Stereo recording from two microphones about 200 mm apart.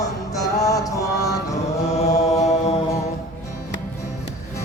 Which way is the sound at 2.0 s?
35° left (ahead or behind).